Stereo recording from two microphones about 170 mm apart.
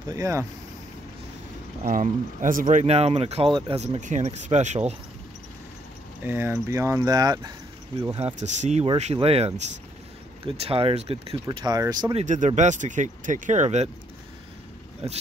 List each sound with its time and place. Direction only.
0.1 s speech: 20° right (ahead or behind)
1.8 s speech: 50° right (ahead or behind)
6.2 s speech: 15° right (ahead or behind)
8.2 s speech: 40° right (ahead or behind)
11.4 s speech: 25° right (ahead or behind)
12.2 s speech: 45° right (ahead or behind)
15.0 s speech: 35° right (ahead or behind)